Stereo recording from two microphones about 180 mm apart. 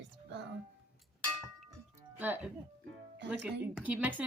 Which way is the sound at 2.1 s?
10° right (ahead or behind).